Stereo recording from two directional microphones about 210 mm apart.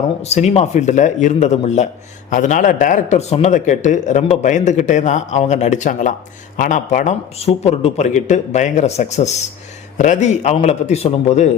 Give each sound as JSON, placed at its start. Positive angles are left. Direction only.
{"t": 0.2, "sound": "speech", "side_deg": 30}